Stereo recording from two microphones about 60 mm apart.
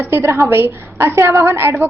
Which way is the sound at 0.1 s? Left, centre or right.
Right.